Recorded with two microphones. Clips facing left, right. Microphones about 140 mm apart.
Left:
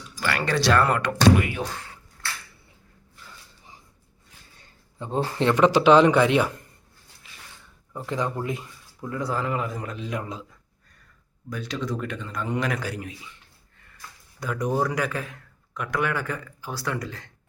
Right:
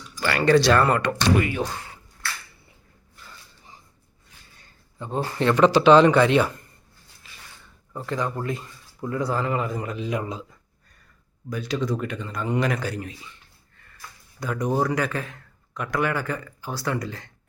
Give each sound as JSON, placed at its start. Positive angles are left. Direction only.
{"t": 0.2, "sound": "a man's voice", "side_deg": 0}
{"t": 4.6, "sound": "a sound", "side_deg": 25}
{"t": 5.4, "sound": "speech", "side_deg": 15}
{"t": 7.9, "sound": "speech", "side_deg": 15}
{"t": 9.0, "sound": "a man's voice", "side_deg": 0}
{"t": 11.4, "sound": "a man's voice", "side_deg": -5}
{"t": 14.3, "sound": "a man's voice", "side_deg": 5}